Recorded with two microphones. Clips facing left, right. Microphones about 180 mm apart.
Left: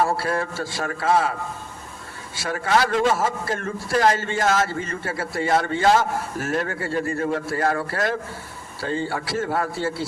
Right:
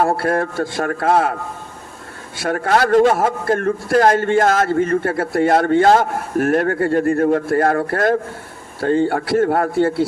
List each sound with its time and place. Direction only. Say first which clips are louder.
0.0 s a man's voice: right 5 dB; 55° right (ahead or behind)